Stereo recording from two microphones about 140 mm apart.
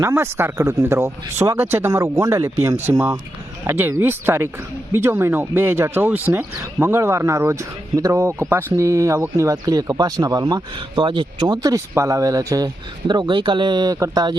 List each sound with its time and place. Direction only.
0.0 s speech: 20° right (ahead or behind)